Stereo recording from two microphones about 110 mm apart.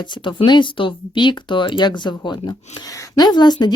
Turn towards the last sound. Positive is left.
turn(degrees=40)  # may be behind; listen again after turning